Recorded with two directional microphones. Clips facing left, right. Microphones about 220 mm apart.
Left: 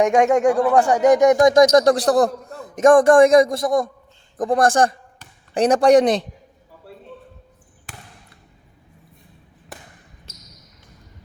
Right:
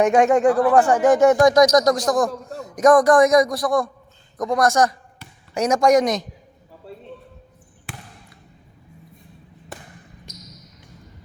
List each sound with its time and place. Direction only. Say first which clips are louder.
0.0 s speech: even; 15° left (ahead or behind); by 6.2 s 30° left (ahead or behind)
10.3 s basketball bounce: right 6 dB; 15° right (ahead or behind)